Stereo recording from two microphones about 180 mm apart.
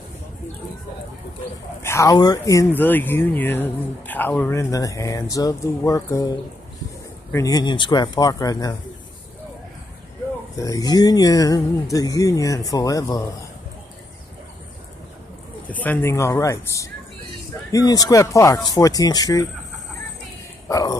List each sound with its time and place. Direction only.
1.8 s speech: 15° left (ahead or behind)
7.3 s speech: 20° left (ahead or behind)
10.5 s speech: 20° left (ahead or behind)
15.7 s speech: 10° left (ahead or behind)
20.6 s speech: 20° left (ahead or behind)